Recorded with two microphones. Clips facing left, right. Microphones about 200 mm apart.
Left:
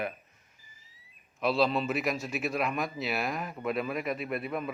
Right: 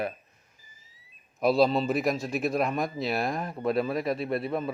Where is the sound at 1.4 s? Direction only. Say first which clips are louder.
Right 4 dB; 40° right (ahead or behind).